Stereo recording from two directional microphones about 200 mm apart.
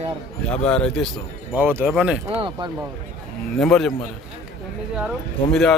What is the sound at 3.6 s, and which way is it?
Speech, centre (ahead or behind).